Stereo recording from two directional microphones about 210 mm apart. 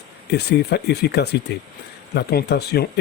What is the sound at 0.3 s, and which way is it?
Speech, 50° left (ahead or behind).